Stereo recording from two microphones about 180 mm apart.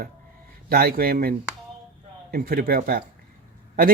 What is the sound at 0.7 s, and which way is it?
Speech, 55° right (ahead or behind).